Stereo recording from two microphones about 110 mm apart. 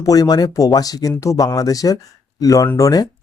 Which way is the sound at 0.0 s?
35° left (ahead or behind).